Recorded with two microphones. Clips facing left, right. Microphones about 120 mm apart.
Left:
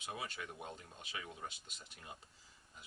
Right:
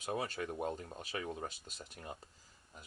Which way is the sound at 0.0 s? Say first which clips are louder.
Right 7 dB; 40° right (ahead or behind).